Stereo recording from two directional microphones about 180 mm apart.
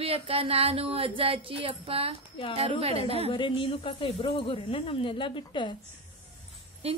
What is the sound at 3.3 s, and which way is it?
Speech, 30° left (ahead or behind).